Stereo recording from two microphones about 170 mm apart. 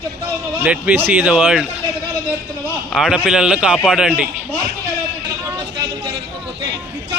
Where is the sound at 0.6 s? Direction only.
10° right (ahead or behind).